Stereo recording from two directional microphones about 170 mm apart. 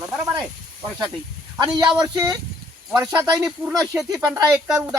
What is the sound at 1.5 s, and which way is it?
Speech, 25° right (ahead or behind).